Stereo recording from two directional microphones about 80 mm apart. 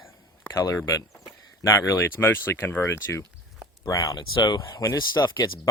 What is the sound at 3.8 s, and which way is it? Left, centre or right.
Speech, left.